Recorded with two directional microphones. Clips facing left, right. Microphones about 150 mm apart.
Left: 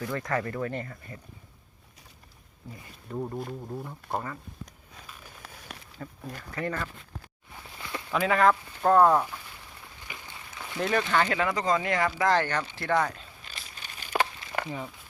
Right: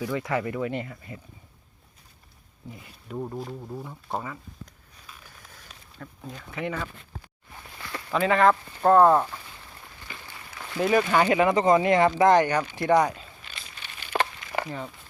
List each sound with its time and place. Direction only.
0.1 s speech: 10° right (ahead or behind)
2.6 s speech: 10° right (ahead or behind)
5.4 s a sound: 75° left (ahead or behind)
6.0 s speech: centre (ahead or behind)
7.8 s a sound: 15° left (ahead or behind)
8.1 s speech: centre (ahead or behind)
10.0 s applause: 15° left (ahead or behind)
10.5 s speech: centre (ahead or behind); by 13.1 s 20° right (ahead or behind)
13.7 s crumpling: 45° left (ahead or behind)
14.7 s speech: 5° left (ahead or behind)